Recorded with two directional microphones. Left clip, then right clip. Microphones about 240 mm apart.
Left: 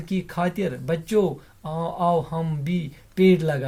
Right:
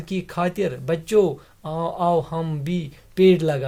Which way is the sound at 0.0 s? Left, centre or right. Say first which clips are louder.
Right 2 dB; right.